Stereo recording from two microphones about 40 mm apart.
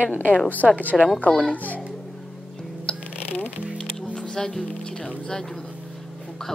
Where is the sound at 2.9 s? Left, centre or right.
Left.